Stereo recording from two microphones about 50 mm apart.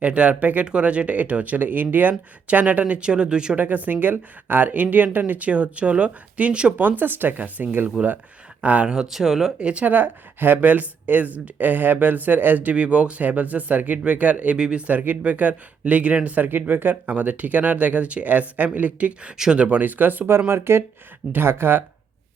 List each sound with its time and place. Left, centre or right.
0.0 s speech: right
3.8 s speech: right
6.7 s speech: right
8.9 s speech: centre
9.6 s speech: right
9.9 s speech: right
14.8 s speech: right
20.5 s speech: right